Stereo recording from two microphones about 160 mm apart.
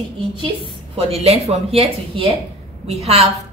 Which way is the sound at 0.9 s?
40° right (ahead or behind).